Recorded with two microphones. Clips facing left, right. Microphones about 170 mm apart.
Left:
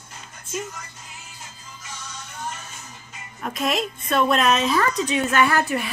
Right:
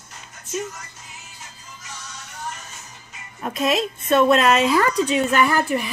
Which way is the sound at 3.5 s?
Centre (ahead or behind).